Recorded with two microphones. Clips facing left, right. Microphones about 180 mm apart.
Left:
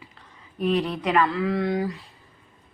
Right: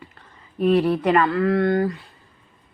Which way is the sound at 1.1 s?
Centre (ahead or behind).